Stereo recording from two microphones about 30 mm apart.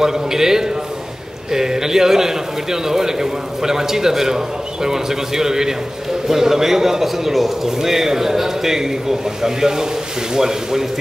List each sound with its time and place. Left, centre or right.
0.0 s a man's voice: centre